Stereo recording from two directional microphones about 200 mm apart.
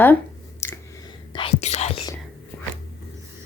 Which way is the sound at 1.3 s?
30° left (ahead or behind).